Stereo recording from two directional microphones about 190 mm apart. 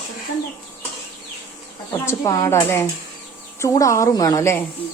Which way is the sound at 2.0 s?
15° left (ahead or behind).